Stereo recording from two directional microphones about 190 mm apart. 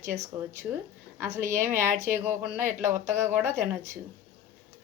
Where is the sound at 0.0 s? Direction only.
15° right (ahead or behind).